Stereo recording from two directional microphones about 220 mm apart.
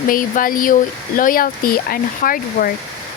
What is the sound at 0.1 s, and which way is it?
Speech, 40° left (ahead or behind).